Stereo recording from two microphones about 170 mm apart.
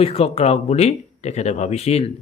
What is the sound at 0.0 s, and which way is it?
Speech, 35° left (ahead or behind).